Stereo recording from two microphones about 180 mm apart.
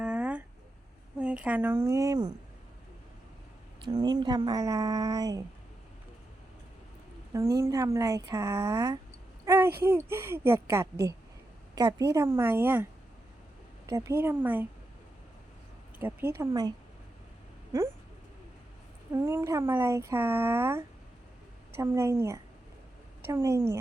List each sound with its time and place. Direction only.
0.0 s a sound: 5° right (ahead or behind)
1.2 s speech: 5° right (ahead or behind)
3.9 s speech: 25° right (ahead or behind)
7.3 s speech: 15° right (ahead or behind)
16.0 s speech: 15° right (ahead or behind)
19.1 s speech: 15° right (ahead or behind)